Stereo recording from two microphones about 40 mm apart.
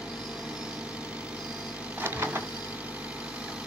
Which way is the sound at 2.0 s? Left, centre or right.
Right.